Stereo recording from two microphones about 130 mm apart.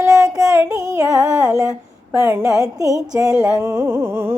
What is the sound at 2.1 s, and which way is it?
Music, 20° right (ahead or behind).